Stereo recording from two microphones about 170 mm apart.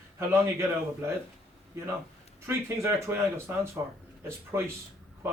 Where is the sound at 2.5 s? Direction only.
15° right (ahead or behind).